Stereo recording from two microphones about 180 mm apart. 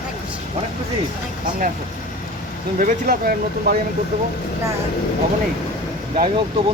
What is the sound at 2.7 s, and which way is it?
Speech, 50° right (ahead or behind).